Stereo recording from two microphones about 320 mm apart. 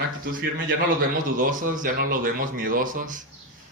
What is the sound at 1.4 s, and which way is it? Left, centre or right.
Speech, right.